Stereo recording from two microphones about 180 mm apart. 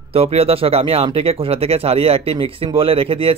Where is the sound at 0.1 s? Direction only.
35° right (ahead or behind).